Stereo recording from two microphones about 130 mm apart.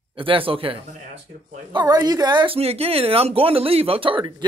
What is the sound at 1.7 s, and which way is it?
A man's voice, 35° right (ahead or behind).